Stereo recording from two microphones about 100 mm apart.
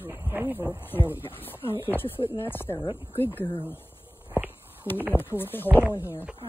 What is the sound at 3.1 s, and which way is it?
Speech, 20° left (ahead or behind).